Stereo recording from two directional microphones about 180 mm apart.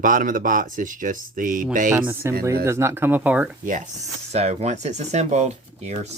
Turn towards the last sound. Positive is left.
turn(degrees=-35)  # may be behind; listen again after turning